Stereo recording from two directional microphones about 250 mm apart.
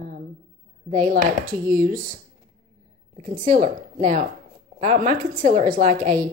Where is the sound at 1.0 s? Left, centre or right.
Right.